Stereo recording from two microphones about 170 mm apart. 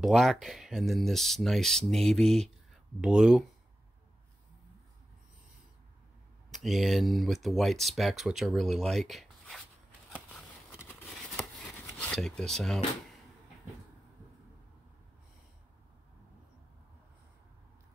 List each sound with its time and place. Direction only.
0.0 s speech: centre (ahead or behind)
6.5 s speech: centre (ahead or behind)
11.1 s a sound: centre (ahead or behind)